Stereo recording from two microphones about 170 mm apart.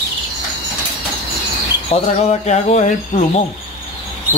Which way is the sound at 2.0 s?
40° left (ahead or behind).